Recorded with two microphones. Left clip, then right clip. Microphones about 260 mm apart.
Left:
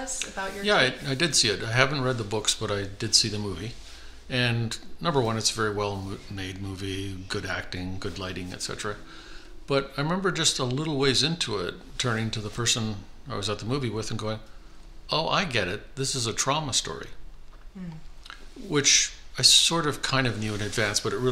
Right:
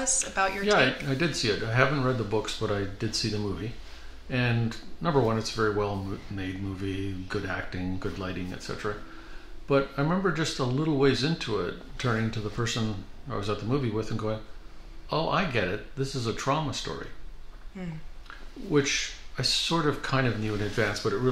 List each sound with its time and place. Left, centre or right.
0.7 s speech: left
18.7 s speech: left